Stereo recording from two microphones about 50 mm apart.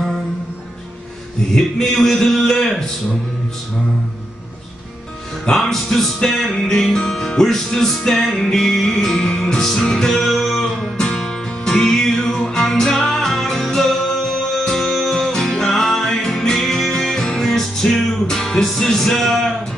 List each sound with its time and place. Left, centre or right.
1.5 s music: centre
5.6 s music: centre
6.5 s music: centre
10.2 s music: centre
12.5 s music: centre
14.3 s music: centre
14.8 s music: centre